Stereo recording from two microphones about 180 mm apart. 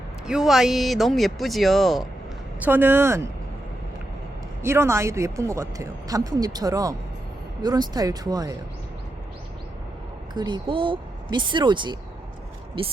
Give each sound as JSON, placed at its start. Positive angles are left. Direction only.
{"t": 0.3, "sound": "speech", "side_deg": 0}
{"t": 2.6, "sound": "speech", "side_deg": -10}
{"t": 4.6, "sound": "speech", "side_deg": -15}
{"t": 10.3, "sound": "speech", "side_deg": -25}